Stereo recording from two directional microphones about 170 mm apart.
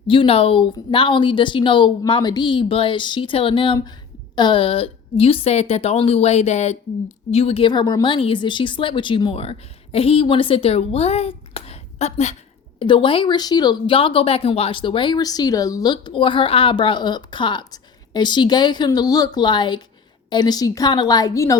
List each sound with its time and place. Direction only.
0.1 s a woman's voice: 30° left (ahead or behind)
12.8 s speech: 30° left (ahead or behind)